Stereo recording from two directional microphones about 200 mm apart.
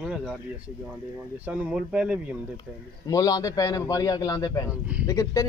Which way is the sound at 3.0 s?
20° left (ahead or behind).